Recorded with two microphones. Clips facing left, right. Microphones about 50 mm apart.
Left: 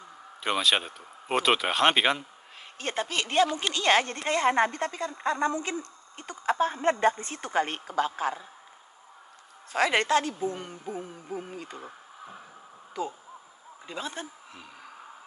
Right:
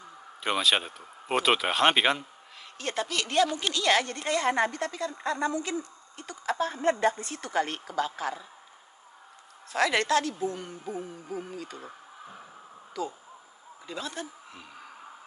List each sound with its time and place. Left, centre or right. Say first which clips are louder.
0.4 s speech: even; centre
2.8 s a woman's voice: left 1 dB; left
9.7 s a woman's voice: left 1 dB; left
13.8 s a woman's voice: even; left